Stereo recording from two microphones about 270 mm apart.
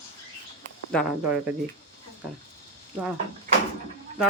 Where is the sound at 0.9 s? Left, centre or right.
Centre.